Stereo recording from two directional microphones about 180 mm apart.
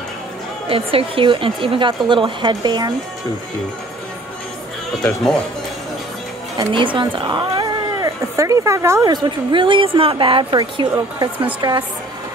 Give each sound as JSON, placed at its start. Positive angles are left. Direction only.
{"t": 0.7, "sound": "speech", "side_deg": -30}
{"t": 6.7, "sound": "speech", "side_deg": -25}